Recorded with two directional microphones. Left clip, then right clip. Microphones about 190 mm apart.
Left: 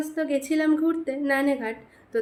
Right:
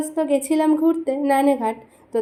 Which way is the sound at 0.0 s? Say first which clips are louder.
Right 6 dB; 20° right (ahead or behind).